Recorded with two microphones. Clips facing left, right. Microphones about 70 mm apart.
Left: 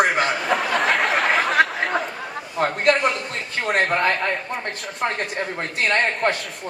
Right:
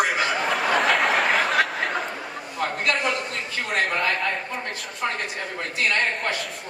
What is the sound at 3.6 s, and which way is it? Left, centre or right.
Speech, left.